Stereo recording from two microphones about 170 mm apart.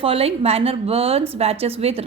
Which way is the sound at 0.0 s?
35° right (ahead or behind).